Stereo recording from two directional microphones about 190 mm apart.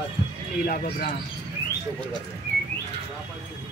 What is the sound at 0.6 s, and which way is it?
Speech, 50° left (ahead or behind).